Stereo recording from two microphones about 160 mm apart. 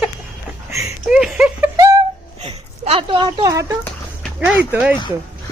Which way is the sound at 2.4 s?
40° right (ahead or behind).